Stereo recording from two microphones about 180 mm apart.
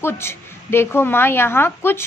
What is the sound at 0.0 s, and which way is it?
A woman's voice, 15° left (ahead or behind).